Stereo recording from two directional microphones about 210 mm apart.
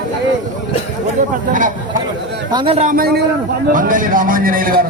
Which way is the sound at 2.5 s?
25° right (ahead or behind).